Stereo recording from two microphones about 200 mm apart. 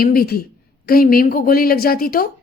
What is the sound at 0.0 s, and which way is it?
A woman's voice, 50° left (ahead or behind).